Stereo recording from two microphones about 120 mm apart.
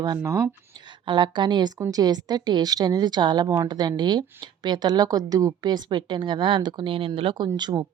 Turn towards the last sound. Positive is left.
turn(degrees=-35)  # may be behind; listen again after turning